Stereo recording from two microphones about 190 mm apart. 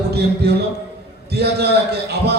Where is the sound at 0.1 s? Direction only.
60° right (ahead or behind).